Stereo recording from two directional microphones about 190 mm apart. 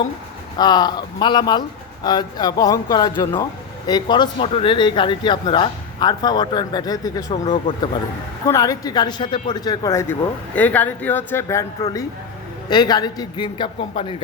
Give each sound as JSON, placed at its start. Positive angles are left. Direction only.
{"t": 0.6, "sound": "speech", "side_deg": 20}